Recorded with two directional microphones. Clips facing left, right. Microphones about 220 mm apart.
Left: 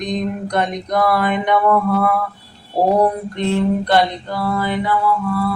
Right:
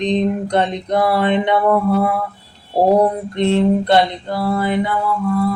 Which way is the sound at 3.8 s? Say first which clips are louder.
Right 2 dB; 25° right (ahead or behind).